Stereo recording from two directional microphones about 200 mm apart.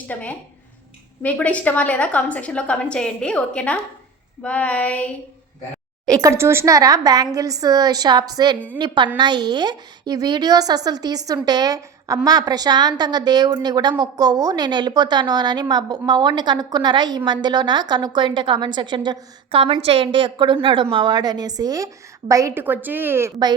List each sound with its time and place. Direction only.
0.1 s a woman's voice: 10° left (ahead or behind)
6.1 s a woman's voice: 15° right (ahead or behind)